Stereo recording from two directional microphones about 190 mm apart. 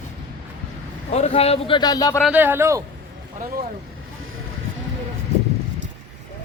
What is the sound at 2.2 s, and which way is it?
Speech, 10° right (ahead or behind).